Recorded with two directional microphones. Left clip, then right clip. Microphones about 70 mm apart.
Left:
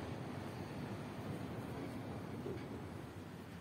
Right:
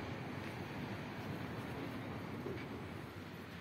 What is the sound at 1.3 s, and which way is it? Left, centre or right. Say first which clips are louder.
Vehicle: right 1 dB; centre.